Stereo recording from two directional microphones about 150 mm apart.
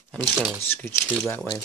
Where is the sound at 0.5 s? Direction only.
15° left (ahead or behind).